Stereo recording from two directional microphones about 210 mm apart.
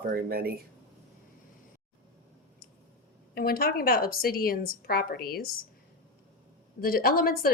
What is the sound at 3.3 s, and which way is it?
Speech, 45° left (ahead or behind).